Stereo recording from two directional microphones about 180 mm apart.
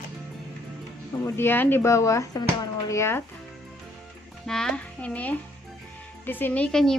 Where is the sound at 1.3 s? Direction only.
15° left (ahead or behind).